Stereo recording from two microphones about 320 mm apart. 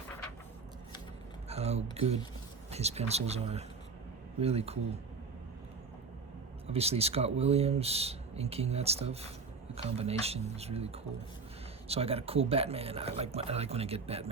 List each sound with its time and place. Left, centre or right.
1.5 s speech: centre
6.7 s speech: centre